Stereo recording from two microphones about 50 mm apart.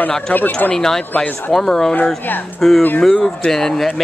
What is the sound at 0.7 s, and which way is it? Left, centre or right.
Speech, centre.